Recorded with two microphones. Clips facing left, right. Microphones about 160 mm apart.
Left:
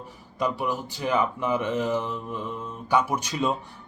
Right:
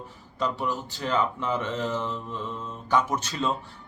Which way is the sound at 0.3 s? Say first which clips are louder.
Left 2 dB; 10° left (ahead or behind).